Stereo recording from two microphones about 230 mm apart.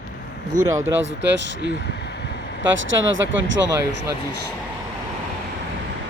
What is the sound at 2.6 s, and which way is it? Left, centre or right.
Speech, right.